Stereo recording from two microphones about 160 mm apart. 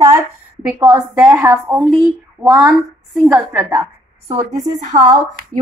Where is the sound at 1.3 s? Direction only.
10° right (ahead or behind).